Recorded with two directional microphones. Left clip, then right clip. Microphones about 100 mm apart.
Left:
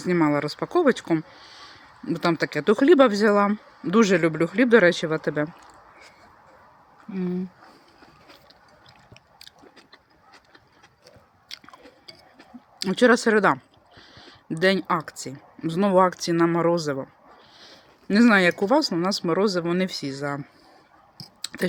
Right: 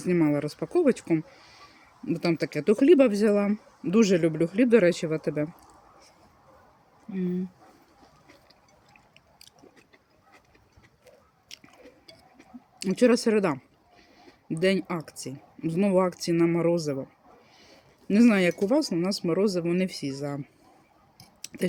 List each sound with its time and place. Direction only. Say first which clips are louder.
0.0 s speech: left 3 dB; 25° right (ahead or behind)
7.1 s speech: left 2 dB; 15° right (ahead or behind)
12.4 s a sound: left 5 dB; 20° right (ahead or behind)
14.4 s speech: left 4 dB; 15° right (ahead or behind)
17.6 s a sound: left 6 dB; 20° right (ahead or behind)
18.7 s speech: left 4 dB; 20° right (ahead or behind)
21.4 s clicking: left 3 dB; 15° right (ahead or behind)